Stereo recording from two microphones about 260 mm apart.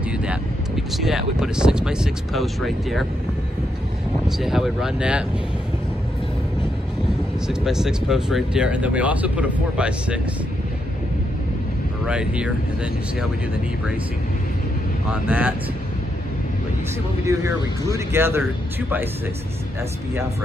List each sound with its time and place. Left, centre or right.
0.9 s speech: centre
4.4 s speech: centre
7.4 s speech: centre
12.1 s speech: centre
15.0 s speech: centre
17.2 s speech: centre